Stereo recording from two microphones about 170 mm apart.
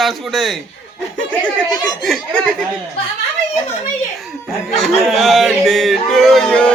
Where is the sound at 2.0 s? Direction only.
Centre (ahead or behind).